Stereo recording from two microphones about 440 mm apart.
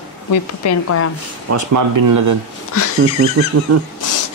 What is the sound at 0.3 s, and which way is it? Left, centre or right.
Speech, left.